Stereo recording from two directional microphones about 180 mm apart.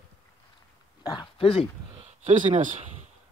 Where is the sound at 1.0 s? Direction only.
25° left (ahead or behind).